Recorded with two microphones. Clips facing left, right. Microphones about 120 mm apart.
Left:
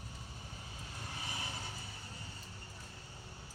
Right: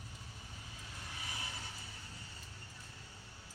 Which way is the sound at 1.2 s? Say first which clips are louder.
Left 3 dB; 25° left (ahead or behind).